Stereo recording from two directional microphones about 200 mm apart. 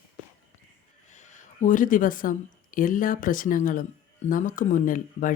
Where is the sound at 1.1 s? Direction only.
40° left (ahead or behind).